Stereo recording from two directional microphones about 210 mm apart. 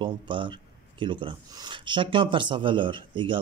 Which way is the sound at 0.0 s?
25° right (ahead or behind).